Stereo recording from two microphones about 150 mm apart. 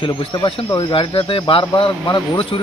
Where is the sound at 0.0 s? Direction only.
35° left (ahead or behind).